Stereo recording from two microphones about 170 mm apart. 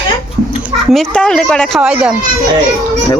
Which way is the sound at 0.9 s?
5° left (ahead or behind).